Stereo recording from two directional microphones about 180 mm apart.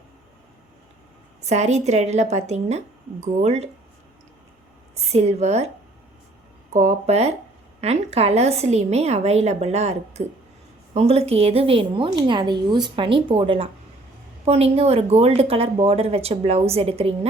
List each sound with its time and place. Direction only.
1.5 s speech: 40° right (ahead or behind)
4.9 s speech: 35° right (ahead or behind)
6.7 s speech: 35° right (ahead or behind)